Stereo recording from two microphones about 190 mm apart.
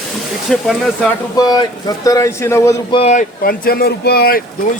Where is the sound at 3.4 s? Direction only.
50° left (ahead or behind).